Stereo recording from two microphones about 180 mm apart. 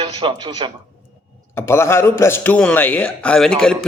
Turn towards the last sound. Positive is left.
turn(degrees=5)  # may be behind; listen again after turning